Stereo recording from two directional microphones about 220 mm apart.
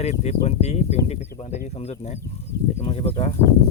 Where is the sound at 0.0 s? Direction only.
30° left (ahead or behind).